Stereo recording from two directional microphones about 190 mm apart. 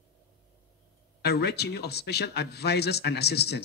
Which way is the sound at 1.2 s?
60° left (ahead or behind).